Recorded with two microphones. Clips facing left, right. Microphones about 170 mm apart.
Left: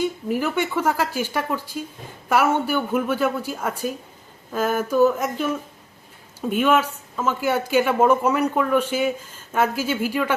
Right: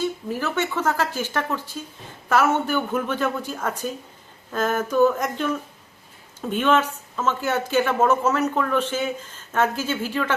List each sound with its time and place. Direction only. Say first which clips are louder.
0.0 s a woman's voice: left 3 dB; 15° left (ahead or behind)